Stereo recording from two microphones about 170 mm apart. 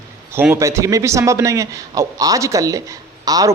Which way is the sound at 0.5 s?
15° right (ahead or behind).